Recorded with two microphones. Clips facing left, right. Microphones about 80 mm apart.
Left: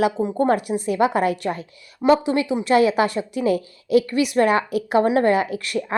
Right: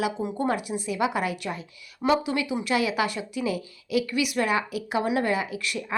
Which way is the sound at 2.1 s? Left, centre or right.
Left.